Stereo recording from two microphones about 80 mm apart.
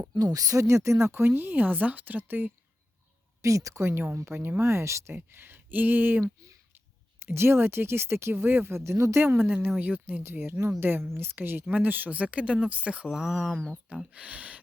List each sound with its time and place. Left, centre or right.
0.2 s speech: right
3.4 s speech: right; by 13.6 s centre
13.9 s speech: centre